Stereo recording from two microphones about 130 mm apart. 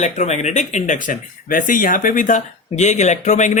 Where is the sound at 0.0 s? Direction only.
65° left (ahead or behind); by 2.4 s 90° left.